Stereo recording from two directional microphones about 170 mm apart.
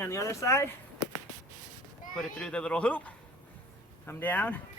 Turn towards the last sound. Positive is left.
turn(degrees=10)  # may be behind; listen again after turning